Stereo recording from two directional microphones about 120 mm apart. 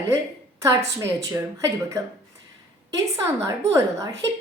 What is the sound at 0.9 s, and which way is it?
A woman's voice, 25° right (ahead or behind).